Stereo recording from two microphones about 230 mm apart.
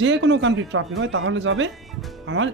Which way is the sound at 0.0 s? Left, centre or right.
Right.